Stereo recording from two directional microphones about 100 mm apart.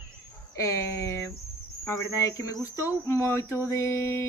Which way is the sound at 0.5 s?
30° left (ahead or behind).